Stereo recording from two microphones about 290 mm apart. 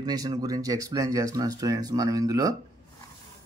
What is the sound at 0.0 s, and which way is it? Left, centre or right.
Speech, centre.